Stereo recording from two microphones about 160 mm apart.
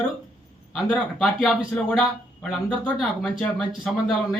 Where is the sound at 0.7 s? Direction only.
Centre (ahead or behind).